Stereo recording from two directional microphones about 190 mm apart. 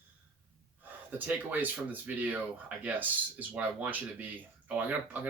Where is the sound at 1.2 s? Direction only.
10° right (ahead or behind).